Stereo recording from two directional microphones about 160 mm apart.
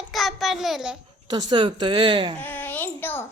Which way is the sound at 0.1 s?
Centre (ahead or behind).